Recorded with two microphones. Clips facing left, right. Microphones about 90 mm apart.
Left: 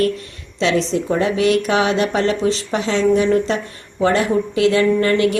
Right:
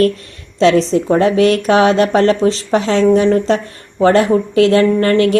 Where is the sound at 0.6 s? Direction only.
40° right (ahead or behind).